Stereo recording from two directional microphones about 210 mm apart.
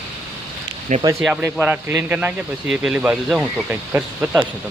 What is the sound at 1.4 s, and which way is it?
Speech, 10° right (ahead or behind).